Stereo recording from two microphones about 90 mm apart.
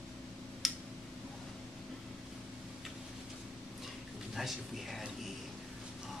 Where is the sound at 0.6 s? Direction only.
Centre (ahead or behind).